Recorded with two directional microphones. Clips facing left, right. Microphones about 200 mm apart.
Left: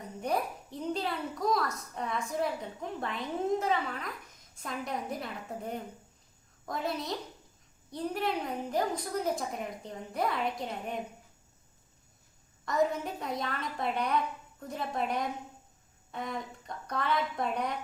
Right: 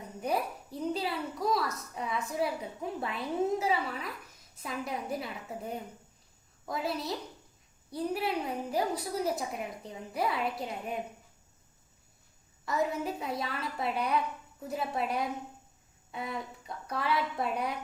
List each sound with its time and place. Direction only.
0.2 s a woman's voice: 5° right (ahead or behind)
12.6 s a woman's voice: 5° right (ahead or behind)